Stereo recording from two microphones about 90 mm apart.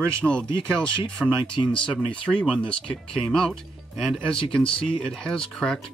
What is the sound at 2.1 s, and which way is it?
Speech, 10° left (ahead or behind).